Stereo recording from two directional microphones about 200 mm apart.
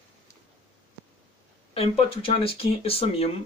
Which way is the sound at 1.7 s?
30° left (ahead or behind).